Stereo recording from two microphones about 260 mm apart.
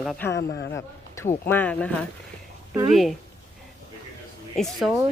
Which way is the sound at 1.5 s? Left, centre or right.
Centre.